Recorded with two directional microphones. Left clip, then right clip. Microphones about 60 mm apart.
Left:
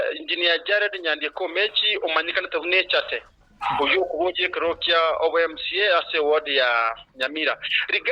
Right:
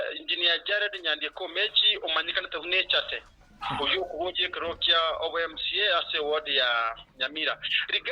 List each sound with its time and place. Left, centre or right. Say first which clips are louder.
0.0 s speech: left 4 dB; left